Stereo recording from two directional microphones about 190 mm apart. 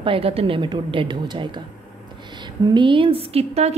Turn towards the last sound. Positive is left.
turn(degrees=-35)  # may be behind; listen again after turning